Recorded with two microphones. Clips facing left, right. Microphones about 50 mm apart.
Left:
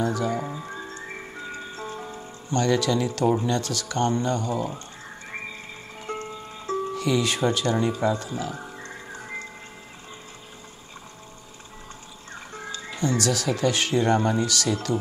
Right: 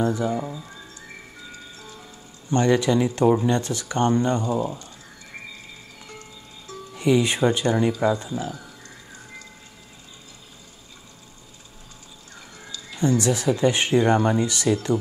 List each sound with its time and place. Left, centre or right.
0.0 s speech: right
0.4 s music: left
2.5 s speech: right
6.0 s music: left
7.0 s speech: right
8.5 s music: left
12.5 s music: left
13.2 s speech: right